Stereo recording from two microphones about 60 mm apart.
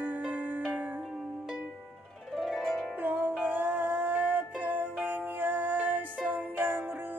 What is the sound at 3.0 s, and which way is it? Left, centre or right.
Music, right.